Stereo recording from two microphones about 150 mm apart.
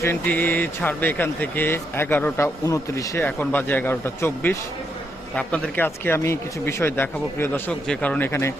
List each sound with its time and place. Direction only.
0.0 s speech: 15° left (ahead or behind)